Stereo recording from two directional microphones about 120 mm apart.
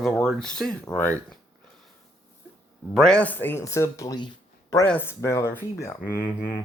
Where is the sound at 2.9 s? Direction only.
5° left (ahead or behind); by 4.3 s 35° left (ahead or behind).